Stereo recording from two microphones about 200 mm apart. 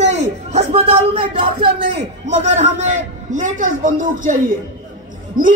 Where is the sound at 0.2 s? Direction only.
35° right (ahead or behind).